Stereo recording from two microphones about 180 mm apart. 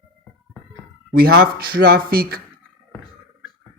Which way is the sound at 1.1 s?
55° right (ahead or behind).